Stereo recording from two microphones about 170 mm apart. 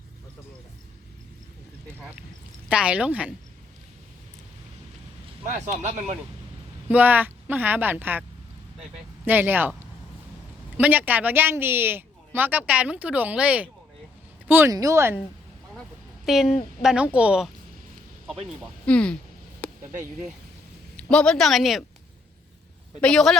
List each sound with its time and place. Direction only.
2.6 s speech: 5° right (ahead or behind)
5.5 s speech: 45° right (ahead or behind)
6.8 s speech: 10° right (ahead or behind)
9.2 s speech: 10° right (ahead or behind)
10.8 s speech: 10° right (ahead or behind)
15.7 s a sound: centre (ahead or behind)
16.8 s speech: 5° right (ahead or behind)
18.9 s speech: 5° left (ahead or behind)
20.9 s speech: 5° left (ahead or behind)
23.0 s speech: 5° left (ahead or behind)